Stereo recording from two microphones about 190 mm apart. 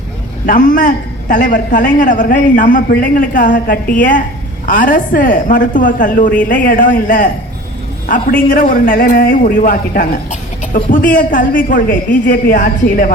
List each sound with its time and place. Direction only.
0.4 s a man's voice: 45° left (ahead or behind)